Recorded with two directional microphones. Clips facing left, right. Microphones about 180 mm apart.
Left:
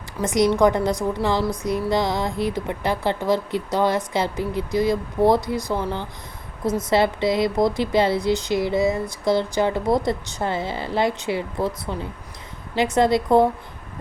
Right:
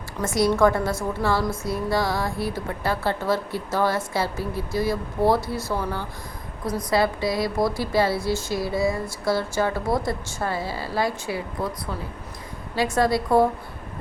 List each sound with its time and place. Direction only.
0.2 s a woman's voice: 20° left (ahead or behind)